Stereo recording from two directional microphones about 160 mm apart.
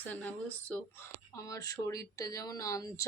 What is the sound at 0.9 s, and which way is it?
Speech, 20° left (ahead or behind).